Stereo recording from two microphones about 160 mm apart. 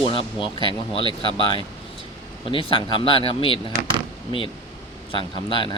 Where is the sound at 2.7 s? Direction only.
30° left (ahead or behind).